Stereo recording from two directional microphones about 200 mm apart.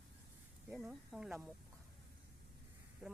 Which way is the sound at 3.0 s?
5° right (ahead or behind).